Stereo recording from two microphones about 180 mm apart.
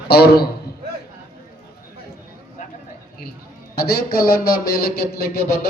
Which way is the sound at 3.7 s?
55° left (ahead or behind).